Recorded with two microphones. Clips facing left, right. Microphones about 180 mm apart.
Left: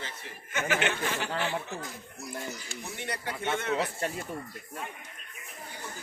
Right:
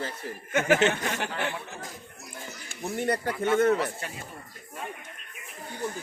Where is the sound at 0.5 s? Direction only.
50° right (ahead or behind).